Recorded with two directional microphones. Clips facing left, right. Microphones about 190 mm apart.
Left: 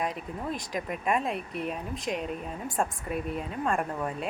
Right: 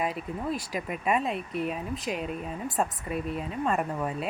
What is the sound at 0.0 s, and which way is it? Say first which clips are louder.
Speech: right 2 dB; 5° right (ahead or behind).